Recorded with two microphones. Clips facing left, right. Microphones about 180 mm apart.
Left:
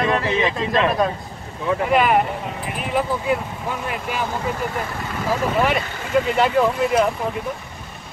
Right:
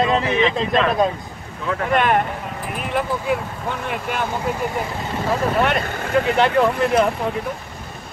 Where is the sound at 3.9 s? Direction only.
Centre (ahead or behind).